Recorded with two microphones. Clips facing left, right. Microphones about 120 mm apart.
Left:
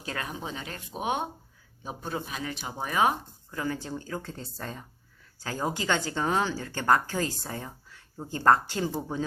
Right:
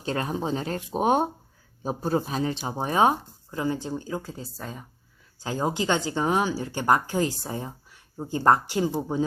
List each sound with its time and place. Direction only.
0.0 s speech: 30° right (ahead or behind); by 4.9 s 5° right (ahead or behind)
5.4 s speech: 20° right (ahead or behind)